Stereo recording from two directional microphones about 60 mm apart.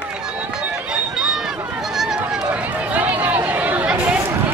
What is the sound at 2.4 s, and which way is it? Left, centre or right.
Chatter, right.